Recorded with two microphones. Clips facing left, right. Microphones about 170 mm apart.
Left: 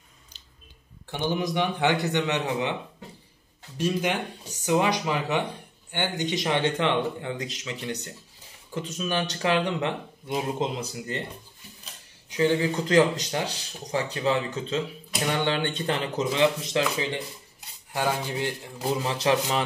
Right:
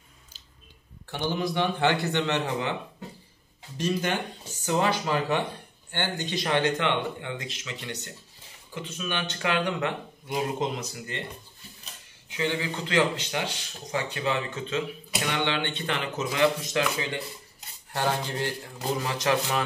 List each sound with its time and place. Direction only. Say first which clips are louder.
1.1 s a man's voice: left 1 dB; 15° left (ahead or behind)
3.7 s a man's voice: left 1 dB; 10° left (ahead or behind); by 11.1 s 30° left (ahead or behind)
12.3 s speech: left 6 dB; 40° left (ahead or behind)
17.9 s a man's voice: left 1 dB; 10° left (ahead or behind)
19.0 s speech: left 2 dB; 30° left (ahead or behind)